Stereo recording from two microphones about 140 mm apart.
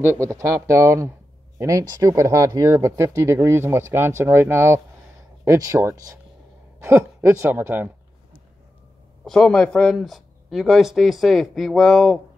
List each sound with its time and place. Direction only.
0.0 s speech: 20° right (ahead or behind)
9.2 s speech: 5° left (ahead or behind)